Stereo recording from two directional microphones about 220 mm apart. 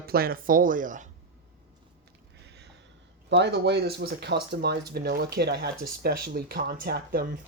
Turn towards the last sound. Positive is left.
turn(degrees=-45)  # may be behind; listen again after turning